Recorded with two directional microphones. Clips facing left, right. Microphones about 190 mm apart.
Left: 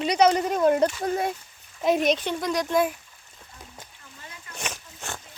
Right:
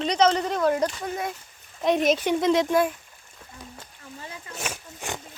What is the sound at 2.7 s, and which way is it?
Speech, centre (ahead or behind).